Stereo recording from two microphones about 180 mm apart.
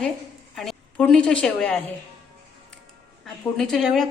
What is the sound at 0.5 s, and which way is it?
A woman's voice, centre (ahead or behind).